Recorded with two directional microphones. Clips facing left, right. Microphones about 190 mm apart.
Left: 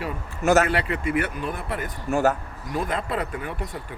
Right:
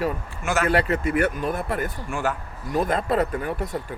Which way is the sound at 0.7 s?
40° right (ahead or behind).